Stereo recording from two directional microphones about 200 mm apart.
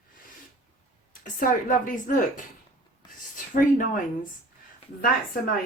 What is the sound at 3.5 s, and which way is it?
Speech, 40° left (ahead or behind).